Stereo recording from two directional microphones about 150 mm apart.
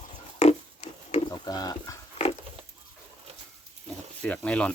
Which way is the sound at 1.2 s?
30° left (ahead or behind).